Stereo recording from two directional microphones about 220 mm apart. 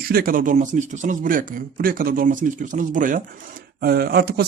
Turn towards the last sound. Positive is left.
turn(degrees=-45)  # may be behind; listen again after turning